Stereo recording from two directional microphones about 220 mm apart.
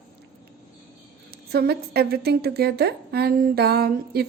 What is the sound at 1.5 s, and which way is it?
A woman's voice, 45° right (ahead or behind).